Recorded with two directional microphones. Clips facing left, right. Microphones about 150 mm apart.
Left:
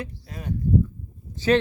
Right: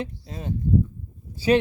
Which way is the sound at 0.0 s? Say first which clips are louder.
Right 2 dB; 25° right (ahead or behind).